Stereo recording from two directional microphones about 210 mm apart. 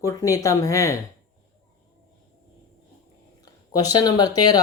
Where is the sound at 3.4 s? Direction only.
15° left (ahead or behind).